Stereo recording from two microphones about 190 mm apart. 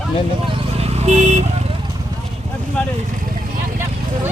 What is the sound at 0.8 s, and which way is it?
Vehicle, 35° right (ahead or behind).